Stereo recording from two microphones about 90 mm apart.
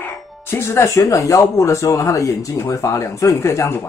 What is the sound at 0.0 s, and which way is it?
Music, 25° left (ahead or behind).